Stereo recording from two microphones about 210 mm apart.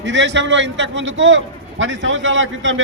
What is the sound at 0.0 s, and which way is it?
A man's voice, 60° right (ahead or behind).